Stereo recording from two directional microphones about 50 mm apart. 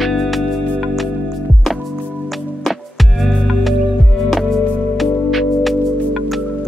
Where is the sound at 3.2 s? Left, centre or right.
Centre.